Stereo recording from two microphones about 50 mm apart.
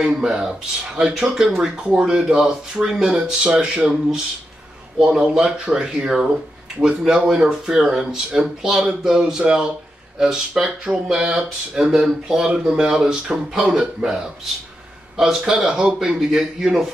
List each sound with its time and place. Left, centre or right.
0.0 s speech: centre
3.7 s speech: right